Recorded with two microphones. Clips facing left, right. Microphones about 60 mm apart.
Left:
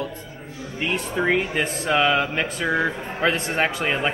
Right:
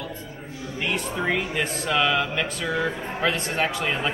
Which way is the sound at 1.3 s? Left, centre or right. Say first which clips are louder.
Left 3 dB; left.